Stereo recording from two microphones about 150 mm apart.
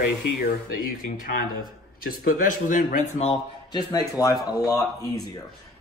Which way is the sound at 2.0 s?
75° left (ahead or behind).